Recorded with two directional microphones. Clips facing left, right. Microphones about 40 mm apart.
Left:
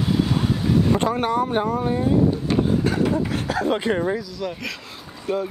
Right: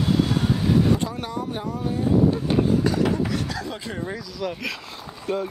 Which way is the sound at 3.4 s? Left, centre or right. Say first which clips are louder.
Left 9 dB; left.